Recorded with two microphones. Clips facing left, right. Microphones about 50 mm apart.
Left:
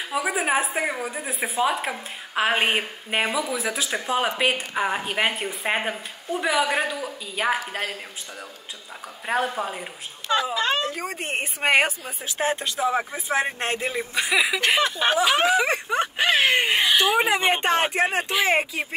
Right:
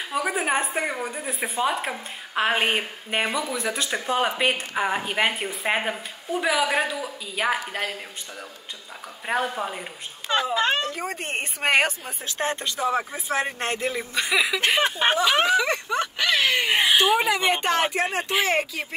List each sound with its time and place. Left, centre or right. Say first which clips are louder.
0.0 s a woman's voice: left 1 dB; centre
10.2 s a child's voice: even; right
10.8 s a woman's voice: left 1 dB; centre
14.8 s speech: even; right
15.4 s speech: left 1 dB; centre; by 16.7 s left
16.7 s speech: right 1 dB; right
17.4 s speech: left 1 dB; centre